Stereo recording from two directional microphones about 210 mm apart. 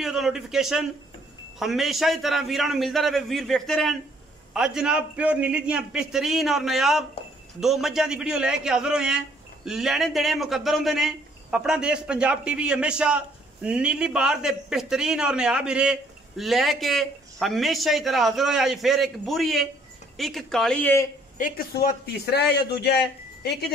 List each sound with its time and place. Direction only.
0.0 s a man's voice: centre (ahead or behind)
21.4 s a man's voice: 45° left (ahead or behind)